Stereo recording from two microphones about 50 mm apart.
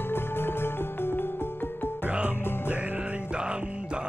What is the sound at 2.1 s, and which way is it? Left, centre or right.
Music, right.